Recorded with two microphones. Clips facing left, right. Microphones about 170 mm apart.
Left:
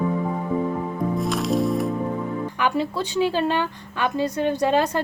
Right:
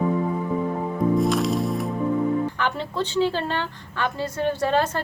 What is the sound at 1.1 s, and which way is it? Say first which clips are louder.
Music: even; centre (ahead or behind).